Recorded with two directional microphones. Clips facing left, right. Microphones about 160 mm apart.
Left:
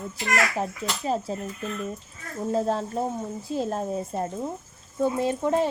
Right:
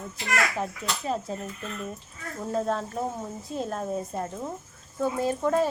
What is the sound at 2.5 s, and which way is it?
A woman's voice, 30° left (ahead or behind).